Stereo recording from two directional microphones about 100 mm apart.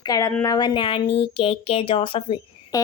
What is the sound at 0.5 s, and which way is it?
A woman's voice, 50° left (ahead or behind).